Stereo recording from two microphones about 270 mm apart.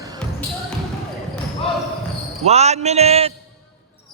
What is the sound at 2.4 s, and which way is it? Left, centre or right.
Speech, right.